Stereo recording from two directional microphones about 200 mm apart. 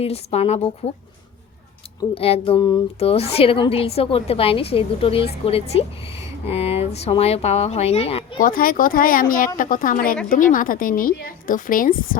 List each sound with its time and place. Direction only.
0.0 s a woman's voice: 30° left (ahead or behind)
2.0 s a woman's voice: 30° left (ahead or behind)
8.4 s a woman's voice: 45° left (ahead or behind)